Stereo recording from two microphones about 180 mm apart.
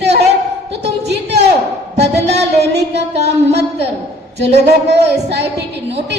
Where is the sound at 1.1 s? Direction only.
70° right (ahead or behind).